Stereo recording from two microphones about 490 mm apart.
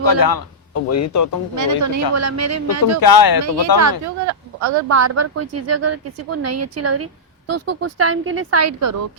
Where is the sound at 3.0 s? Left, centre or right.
Left.